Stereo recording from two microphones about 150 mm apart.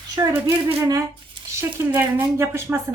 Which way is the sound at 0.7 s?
20° right (ahead or behind).